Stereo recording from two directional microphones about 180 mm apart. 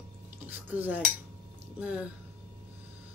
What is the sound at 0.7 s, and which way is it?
Speech, 10° right (ahead or behind).